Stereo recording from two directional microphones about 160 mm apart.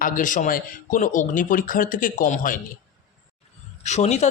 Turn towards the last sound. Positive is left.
turn(degrees=45)  # may be behind; listen again after turning